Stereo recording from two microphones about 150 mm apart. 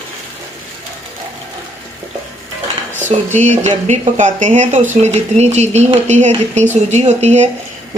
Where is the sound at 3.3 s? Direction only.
50° right (ahead or behind).